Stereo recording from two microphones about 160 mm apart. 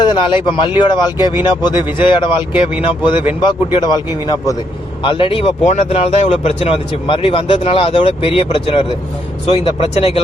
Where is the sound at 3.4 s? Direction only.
25° left (ahead or behind).